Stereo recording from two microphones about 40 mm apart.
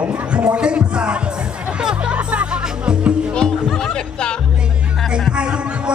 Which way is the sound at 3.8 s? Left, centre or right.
Centre.